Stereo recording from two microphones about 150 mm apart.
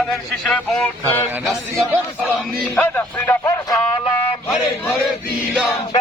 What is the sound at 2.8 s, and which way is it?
Speech, 15° left (ahead or behind).